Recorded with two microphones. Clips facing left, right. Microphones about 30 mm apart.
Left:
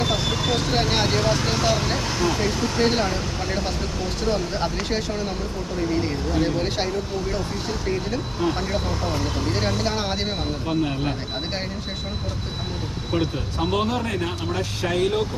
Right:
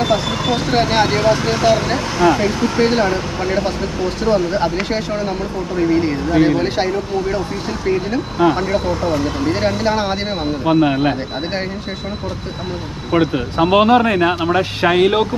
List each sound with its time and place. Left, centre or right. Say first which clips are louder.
0.0 s speech: right 6 dB; centre
10.7 s speech: right 11 dB; right
13.1 s speech: right 9 dB; right